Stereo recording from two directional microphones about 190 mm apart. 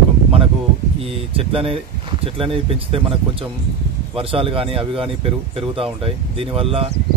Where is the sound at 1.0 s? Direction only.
30° right (ahead or behind).